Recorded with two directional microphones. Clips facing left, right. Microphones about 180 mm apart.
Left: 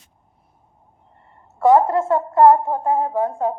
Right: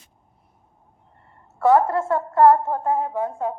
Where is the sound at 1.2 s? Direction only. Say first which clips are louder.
Left 3 dB; 20° left (ahead or behind).